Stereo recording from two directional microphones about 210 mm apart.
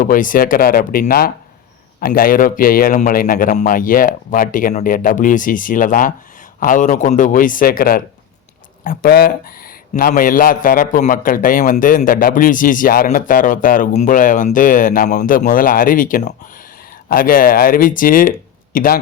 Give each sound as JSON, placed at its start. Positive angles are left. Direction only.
{"t": 0.0, "sound": "a man's voice", "side_deg": 40}